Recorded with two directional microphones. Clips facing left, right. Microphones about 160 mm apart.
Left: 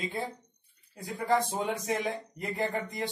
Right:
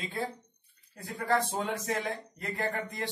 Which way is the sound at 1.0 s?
15° left (ahead or behind).